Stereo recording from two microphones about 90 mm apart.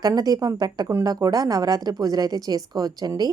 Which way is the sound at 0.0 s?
45° right (ahead or behind).